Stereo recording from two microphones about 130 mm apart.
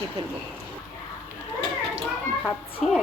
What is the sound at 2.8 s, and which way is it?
Speech, centre (ahead or behind).